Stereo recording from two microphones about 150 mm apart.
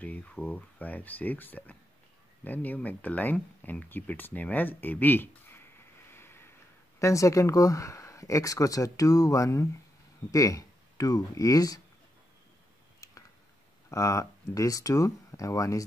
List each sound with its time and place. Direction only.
0.0 s speech: 10° left (ahead or behind)
6.1 s a sound: 15° left (ahead or behind)
7.0 s speech: 20° left (ahead or behind)
13.8 s speech: 20° left (ahead or behind)